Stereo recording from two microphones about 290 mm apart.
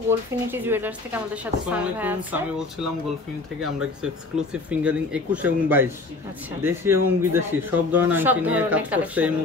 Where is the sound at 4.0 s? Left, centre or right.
Centre.